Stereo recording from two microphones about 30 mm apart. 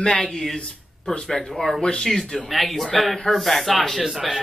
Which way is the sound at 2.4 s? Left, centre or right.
Centre.